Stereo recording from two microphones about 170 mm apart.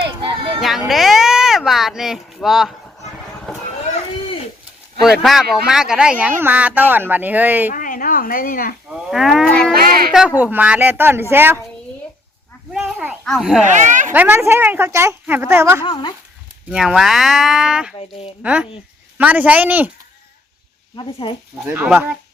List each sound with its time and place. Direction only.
0.0 s a sound: 30° right (ahead or behind)
0.6 s a sound: centre (ahead or behind)
5.0 s speech: centre (ahead or behind)
7.7 s a sound: 50° left (ahead or behind)
8.9 s speech: 5° right (ahead or behind)
12.7 s a sound: 10° right (ahead or behind)
13.2 s speech: centre (ahead or behind)
13.7 s speech: 45° right (ahead or behind)
14.1 s speech: 10° right (ahead or behind)
15.8 s speech: 30° left (ahead or behind)
16.6 s speech: 5° right (ahead or behind)
20.9 s speech: 30° left (ahead or behind)